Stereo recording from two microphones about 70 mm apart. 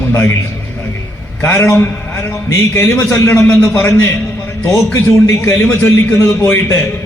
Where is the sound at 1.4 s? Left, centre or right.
Left.